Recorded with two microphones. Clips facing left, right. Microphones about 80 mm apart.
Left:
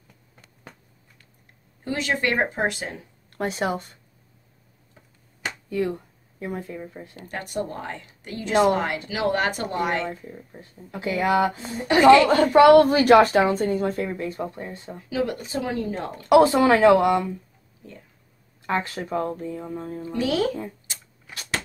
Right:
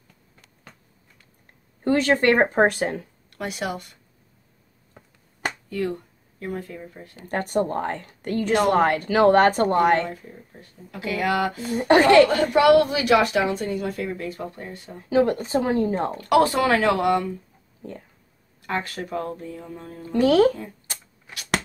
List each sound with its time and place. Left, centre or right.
1.9 s speech: right
3.3 s a woman's voice: left
5.7 s speech: left
7.2 s speech: right
10.6 s speech: left
11.7 s speech: right
12.3 s a woman's voice: left
15.0 s speech: right
16.2 s speech: left
18.7 s speech: left
20.1 s speech: right